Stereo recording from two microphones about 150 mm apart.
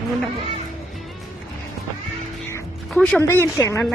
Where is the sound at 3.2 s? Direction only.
15° left (ahead or behind).